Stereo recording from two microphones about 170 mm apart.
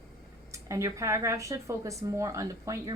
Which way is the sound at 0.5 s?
15° right (ahead or behind).